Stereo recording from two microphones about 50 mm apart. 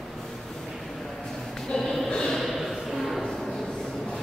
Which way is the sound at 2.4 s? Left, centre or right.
Centre.